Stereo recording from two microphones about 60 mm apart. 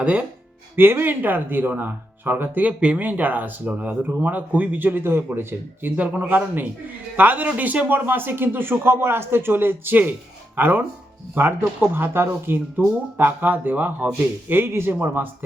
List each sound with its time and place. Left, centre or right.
0.0 s speech: right
0.8 s speech: right
6.0 s speech: right